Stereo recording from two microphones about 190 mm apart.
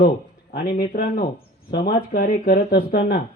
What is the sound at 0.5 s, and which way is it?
Speech, 50° left (ahead or behind).